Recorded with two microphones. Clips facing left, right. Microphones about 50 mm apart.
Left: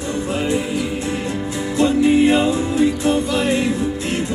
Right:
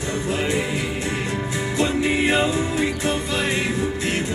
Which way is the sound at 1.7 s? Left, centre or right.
Right.